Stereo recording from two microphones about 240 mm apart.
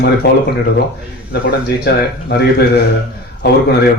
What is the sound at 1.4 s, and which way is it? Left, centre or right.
Speech, left.